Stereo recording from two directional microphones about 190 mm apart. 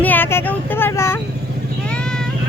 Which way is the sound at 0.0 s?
10° left (ahead or behind).